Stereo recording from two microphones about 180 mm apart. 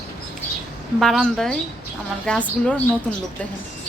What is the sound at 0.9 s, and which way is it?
A woman's voice, centre (ahead or behind).